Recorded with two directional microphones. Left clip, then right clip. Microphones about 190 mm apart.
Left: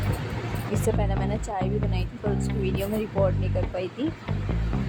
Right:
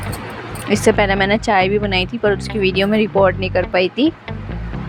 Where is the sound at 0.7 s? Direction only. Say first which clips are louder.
Right 15 dB; 20° right (ahead or behind).